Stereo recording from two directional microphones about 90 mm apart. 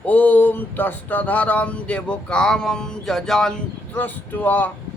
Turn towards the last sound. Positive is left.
turn(degrees=20)  # may be behind; listen again after turning